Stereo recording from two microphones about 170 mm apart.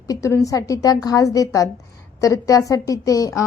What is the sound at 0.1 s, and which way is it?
A woman's voice, 20° left (ahead or behind).